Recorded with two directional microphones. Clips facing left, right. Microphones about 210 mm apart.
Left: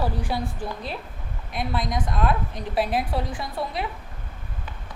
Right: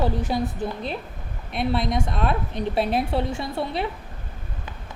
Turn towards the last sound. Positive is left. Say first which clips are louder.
# right 3 dB
turn(degrees=-25)  # may be behind; listen again after turning